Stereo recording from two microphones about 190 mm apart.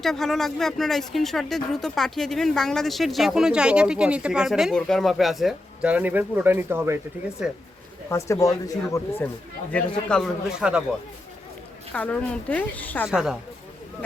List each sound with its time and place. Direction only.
0.0 s speech: centre (ahead or behind)
8.1 s speech: 15° left (ahead or behind)
9.7 s speech: 5° left (ahead or behind)
11.9 s speech: 5° left (ahead or behind)
13.1 s speech: 5° right (ahead or behind)